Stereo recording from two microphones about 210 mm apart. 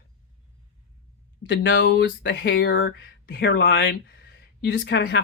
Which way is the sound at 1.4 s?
60° left (ahead or behind).